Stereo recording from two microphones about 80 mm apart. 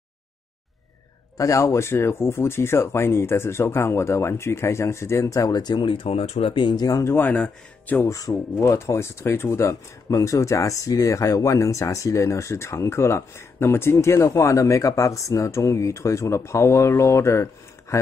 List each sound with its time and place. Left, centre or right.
1.4 s speech: left
5.6 s speech: left
6.7 s speech: left
7.1 s speech: left
8.0 s speech: left